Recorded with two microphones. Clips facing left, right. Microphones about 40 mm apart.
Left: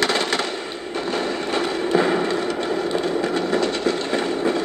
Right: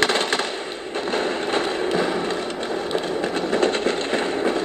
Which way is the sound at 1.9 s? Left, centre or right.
Left.